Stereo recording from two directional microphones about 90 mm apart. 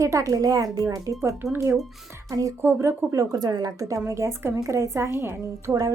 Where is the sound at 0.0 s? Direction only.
35° right (ahead or behind).